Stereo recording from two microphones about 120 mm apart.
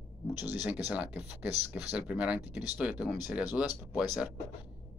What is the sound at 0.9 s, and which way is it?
Speech, 10° right (ahead or behind).